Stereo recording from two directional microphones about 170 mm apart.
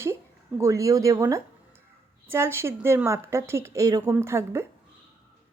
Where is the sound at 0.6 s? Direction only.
20° right (ahead or behind).